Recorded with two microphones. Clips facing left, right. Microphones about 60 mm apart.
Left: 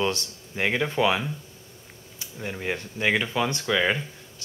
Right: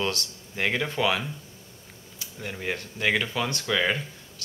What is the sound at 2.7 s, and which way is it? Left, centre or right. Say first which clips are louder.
Speech: left 1 dB; left.